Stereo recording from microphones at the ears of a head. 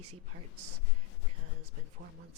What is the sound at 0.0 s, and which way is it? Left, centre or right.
Speech, right.